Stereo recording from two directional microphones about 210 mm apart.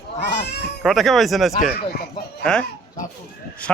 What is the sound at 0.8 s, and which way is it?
Speech, centre (ahead or behind).